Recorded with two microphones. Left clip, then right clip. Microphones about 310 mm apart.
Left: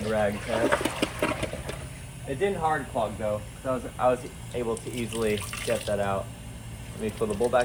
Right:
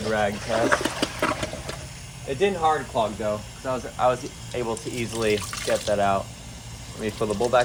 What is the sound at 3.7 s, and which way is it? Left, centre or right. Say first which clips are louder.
Speech: right 2 dB; right.